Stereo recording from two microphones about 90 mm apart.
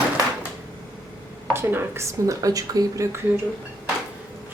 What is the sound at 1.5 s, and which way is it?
Speech, 25° right (ahead or behind).